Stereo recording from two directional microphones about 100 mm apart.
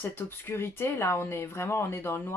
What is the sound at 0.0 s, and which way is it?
Speech, 20° left (ahead or behind).